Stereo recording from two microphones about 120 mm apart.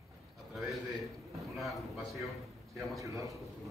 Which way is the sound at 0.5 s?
Centre (ahead or behind).